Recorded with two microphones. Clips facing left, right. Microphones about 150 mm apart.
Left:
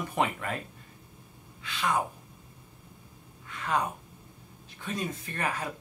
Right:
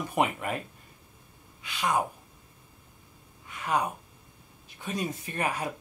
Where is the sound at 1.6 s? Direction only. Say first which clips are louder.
Right 1 dB; 15° right (ahead or behind).